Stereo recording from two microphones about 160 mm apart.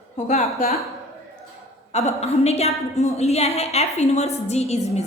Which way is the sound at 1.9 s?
45° left (ahead or behind).